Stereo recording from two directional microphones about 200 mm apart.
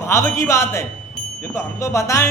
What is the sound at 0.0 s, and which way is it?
Speech, 15° left (ahead or behind).